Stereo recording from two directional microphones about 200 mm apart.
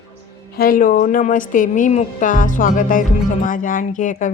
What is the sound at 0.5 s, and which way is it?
Speech, 45° left (ahead or behind).